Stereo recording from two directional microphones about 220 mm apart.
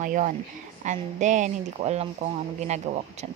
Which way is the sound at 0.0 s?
35° right (ahead or behind).